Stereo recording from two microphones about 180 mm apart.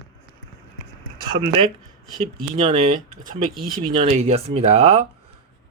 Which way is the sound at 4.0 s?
35° right (ahead or behind).